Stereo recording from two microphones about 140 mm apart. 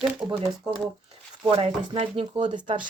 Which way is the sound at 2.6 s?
35° right (ahead or behind).